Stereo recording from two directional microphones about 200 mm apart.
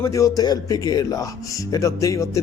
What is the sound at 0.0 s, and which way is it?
A man's voice, 15° left (ahead or behind).